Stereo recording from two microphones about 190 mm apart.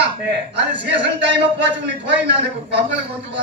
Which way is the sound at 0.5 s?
65° right (ahead or behind).